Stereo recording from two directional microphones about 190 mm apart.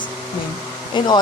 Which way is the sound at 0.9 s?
25° left (ahead or behind).